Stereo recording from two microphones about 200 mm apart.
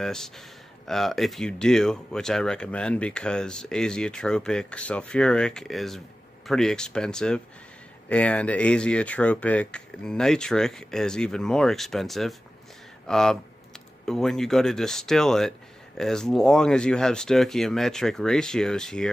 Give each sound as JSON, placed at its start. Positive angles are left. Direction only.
{"t": 0.0, "sound": "speech", "side_deg": 0}